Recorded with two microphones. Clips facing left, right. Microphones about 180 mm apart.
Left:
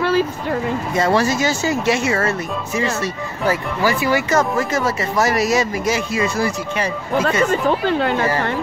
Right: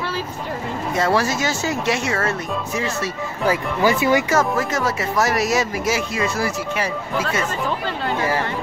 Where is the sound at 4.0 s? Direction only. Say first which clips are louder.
Right 1 dB; 20° right (ahead or behind).